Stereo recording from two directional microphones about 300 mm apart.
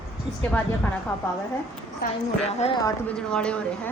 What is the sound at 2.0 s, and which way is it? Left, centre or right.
Speech, left.